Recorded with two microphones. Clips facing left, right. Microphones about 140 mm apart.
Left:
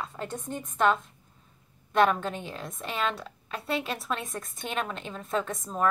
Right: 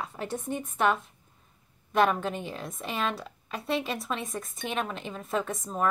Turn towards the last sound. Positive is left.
turn(degrees=-5)  # may be behind; listen again after turning